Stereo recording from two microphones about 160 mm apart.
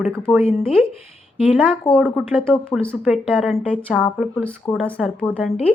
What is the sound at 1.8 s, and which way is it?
Speech, 5° left (ahead or behind).